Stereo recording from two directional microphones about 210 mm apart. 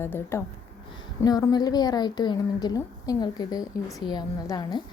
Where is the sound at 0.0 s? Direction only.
10° left (ahead or behind).